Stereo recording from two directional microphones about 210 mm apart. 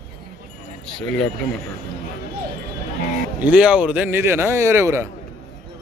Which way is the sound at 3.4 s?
5° right (ahead or behind).